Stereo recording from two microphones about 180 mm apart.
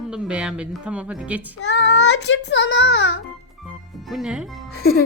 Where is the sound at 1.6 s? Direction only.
80° left.